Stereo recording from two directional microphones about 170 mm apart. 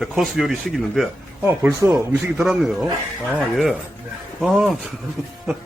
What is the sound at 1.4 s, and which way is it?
A man's voice, 10° right (ahead or behind).